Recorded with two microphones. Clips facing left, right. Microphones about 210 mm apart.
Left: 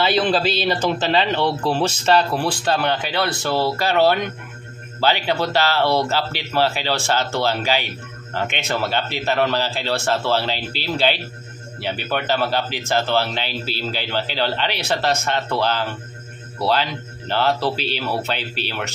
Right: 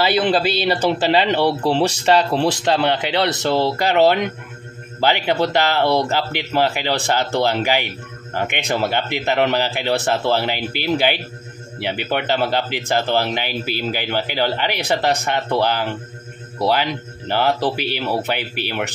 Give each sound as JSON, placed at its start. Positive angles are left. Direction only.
{"t": 0.0, "sound": "a man's voice", "side_deg": -10}